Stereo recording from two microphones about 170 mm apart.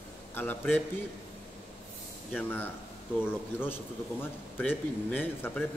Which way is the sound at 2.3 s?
10° left (ahead or behind).